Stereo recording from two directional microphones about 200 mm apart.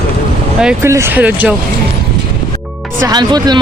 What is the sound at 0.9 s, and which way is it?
Speech, 15° right (ahead or behind).